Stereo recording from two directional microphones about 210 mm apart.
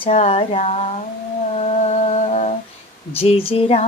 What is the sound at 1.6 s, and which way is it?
Humming, 30° left (ahead or behind).